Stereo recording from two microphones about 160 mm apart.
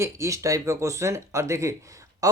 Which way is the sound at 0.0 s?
20° right (ahead or behind).